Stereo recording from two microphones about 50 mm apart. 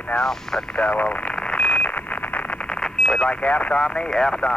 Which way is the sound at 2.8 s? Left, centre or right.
Centre.